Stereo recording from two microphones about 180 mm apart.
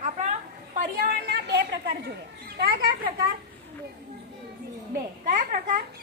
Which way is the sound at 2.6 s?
55° right (ahead or behind).